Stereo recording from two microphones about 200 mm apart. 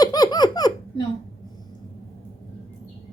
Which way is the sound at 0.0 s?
20° left (ahead or behind).